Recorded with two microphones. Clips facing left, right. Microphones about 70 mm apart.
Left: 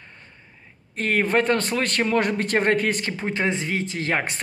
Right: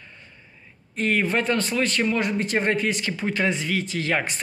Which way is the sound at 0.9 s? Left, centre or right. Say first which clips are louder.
Left 2 dB; left.